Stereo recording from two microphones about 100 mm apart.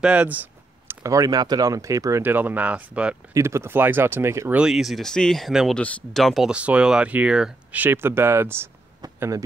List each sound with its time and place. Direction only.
0.0 s a sound: 15° right (ahead or behind)
1.0 s speech: 35° right (ahead or behind)
2.2 s speech: 20° right (ahead or behind)
3.3 s speech: 25° right (ahead or behind)
4.6 s speech: 5° right (ahead or behind)
5.8 s speech: 15° left (ahead or behind)
6.5 s speech: 10° right (ahead or behind)
7.8 s speech: 25° right (ahead or behind)
9.0 s a sound: 40° right (ahead or behind)